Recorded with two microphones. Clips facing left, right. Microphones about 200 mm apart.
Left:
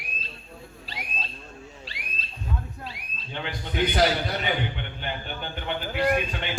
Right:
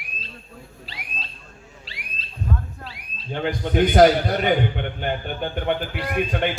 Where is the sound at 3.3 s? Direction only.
45° right (ahead or behind).